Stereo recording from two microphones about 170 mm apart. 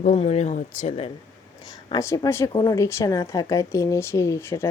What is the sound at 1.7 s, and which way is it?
Speech, 20° left (ahead or behind).